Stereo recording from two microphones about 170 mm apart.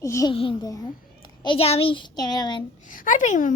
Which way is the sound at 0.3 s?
30° left (ahead or behind).